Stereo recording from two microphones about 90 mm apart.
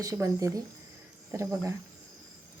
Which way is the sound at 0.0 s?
40° right (ahead or behind).